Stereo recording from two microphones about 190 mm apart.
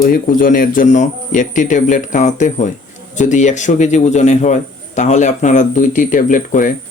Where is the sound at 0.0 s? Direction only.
50° left (ahead or behind).